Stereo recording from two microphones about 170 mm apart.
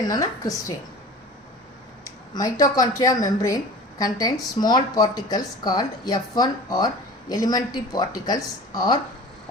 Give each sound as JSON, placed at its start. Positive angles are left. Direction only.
{"t": 0.0, "sound": "a woman's voice", "side_deg": 20}
{"t": 2.3, "sound": "a woman's voice", "side_deg": 20}